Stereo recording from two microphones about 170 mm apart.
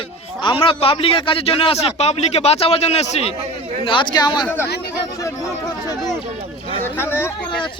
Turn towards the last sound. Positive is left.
turn(degrees=15)  # may be behind; listen again after turning